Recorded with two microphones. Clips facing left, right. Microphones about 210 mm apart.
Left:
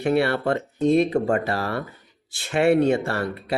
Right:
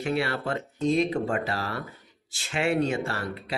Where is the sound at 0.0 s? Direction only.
60° left (ahead or behind).